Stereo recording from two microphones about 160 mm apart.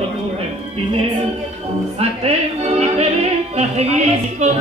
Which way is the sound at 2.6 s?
40° right (ahead or behind).